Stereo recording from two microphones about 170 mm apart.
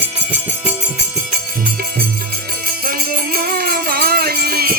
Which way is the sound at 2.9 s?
55° right (ahead or behind).